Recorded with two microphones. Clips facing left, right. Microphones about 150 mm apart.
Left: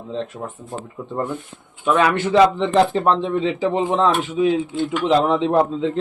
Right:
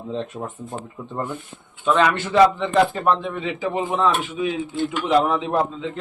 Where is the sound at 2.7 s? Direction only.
30° left (ahead or behind).